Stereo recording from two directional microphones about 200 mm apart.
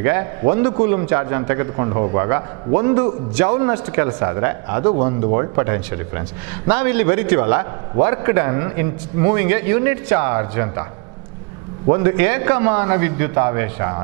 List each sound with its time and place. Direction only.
0.0 s a man's voice: 15° right (ahead or behind)
11.9 s a man's voice: 15° right (ahead or behind)